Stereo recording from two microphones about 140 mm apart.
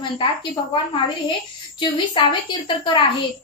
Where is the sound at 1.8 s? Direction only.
35° left (ahead or behind).